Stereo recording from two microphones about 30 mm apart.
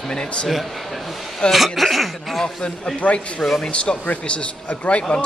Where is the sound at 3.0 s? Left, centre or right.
Left.